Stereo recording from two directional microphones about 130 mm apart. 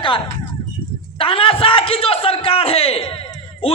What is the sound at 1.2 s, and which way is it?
Speech, 45° left (ahead or behind).